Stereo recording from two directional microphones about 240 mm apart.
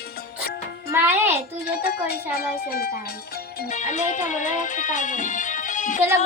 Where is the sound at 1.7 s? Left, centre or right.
Left.